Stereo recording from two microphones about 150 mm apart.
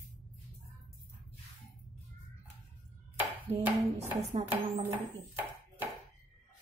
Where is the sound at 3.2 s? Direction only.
10° right (ahead or behind).